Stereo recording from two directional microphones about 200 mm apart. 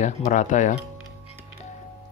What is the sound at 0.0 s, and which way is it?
Speech, 40° left (ahead or behind).